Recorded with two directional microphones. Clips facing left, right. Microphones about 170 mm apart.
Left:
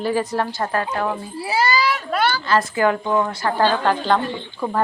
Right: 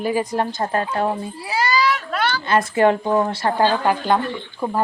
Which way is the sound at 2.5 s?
25° right (ahead or behind).